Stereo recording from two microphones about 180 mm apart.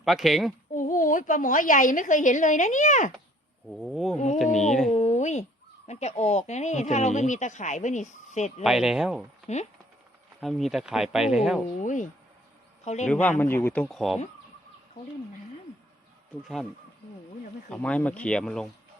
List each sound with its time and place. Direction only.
0.0 s speech: centre (ahead or behind)
0.7 s a woman's voice: 45° left (ahead or behind)
3.7 s speech: centre (ahead or behind)
4.4 s speech: 40° left (ahead or behind)
4.9 s a sound: 40° left (ahead or behind)
5.9 s speech: 40° left (ahead or behind)
8.6 s speech: 5° right (ahead or behind)
10.4 s speech: centre (ahead or behind)
11.8 s a woman's voice: 45° left (ahead or behind)
13.4 s a man's voice: 10° left (ahead or behind)
13.8 s speech: centre (ahead or behind)
16.4 s speech: centre (ahead or behind)
17.7 s speech: 5° left (ahead or behind)